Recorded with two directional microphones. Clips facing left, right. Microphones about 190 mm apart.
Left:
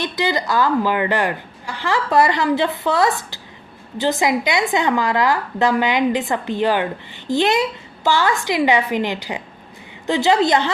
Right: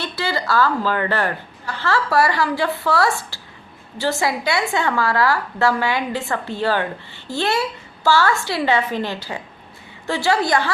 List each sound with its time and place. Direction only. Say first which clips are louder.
0.0 s a woman's voice: left 3 dB; 15° left (ahead or behind)